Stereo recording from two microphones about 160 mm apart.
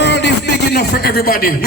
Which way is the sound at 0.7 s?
80° left.